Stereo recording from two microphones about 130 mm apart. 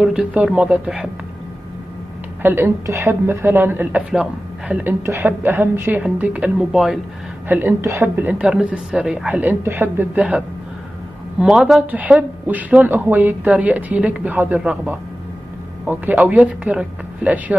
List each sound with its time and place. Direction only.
0.0 s speech: 5° right (ahead or behind)
2.4 s speech: 20° right (ahead or behind)
5.0 s speech: 20° right (ahead or behind); by 7.0 s centre (ahead or behind)
7.4 s speech: 15° right (ahead or behind)